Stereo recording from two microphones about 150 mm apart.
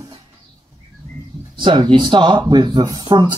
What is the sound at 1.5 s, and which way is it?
Speech, 30° right (ahead or behind).